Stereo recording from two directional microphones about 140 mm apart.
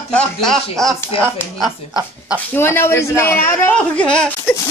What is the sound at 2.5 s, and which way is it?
Speech, 15° left (ahead or behind).